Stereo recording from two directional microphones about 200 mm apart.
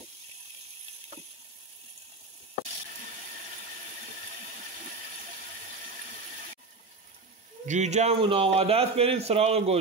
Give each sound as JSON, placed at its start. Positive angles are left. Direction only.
{"t": 7.6, "sound": "a man's voice", "side_deg": -35}